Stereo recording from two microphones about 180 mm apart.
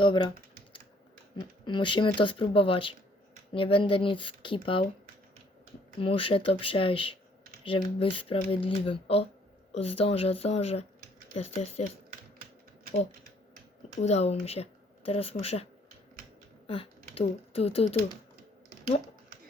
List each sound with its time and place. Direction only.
0.0 s speech: 25° left (ahead or behind)
1.4 s speech: 25° left (ahead or behind)
6.0 s a woman's voice: 30° left (ahead or behind)
14.0 s speech: 35° left (ahead or behind)
16.6 s speech: 30° left (ahead or behind)